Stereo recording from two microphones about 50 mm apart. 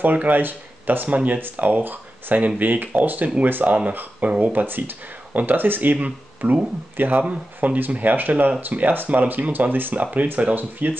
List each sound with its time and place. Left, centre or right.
0.0 s speech: right